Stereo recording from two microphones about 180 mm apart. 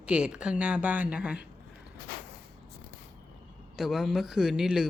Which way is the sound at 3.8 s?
Centre (ahead or behind).